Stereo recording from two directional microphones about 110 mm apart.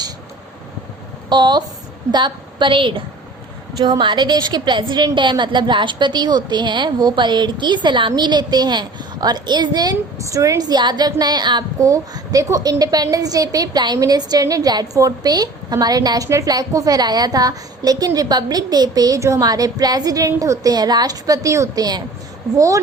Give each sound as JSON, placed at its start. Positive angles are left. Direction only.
{"t": 1.3, "sound": "a woman's voice", "side_deg": -40}